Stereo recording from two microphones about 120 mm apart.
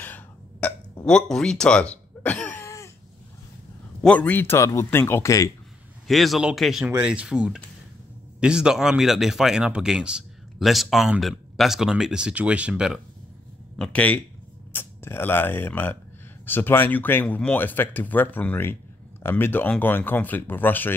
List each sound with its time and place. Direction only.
0.0 s throat clearing: 15° left (ahead or behind)
1.0 s speech: 5° left (ahead or behind)
4.0 s speech: 10° left (ahead or behind); by 5.5 s 25° left (ahead or behind)
6.0 s speech: centre (ahead or behind)
13.7 s speech: 10° left (ahead or behind)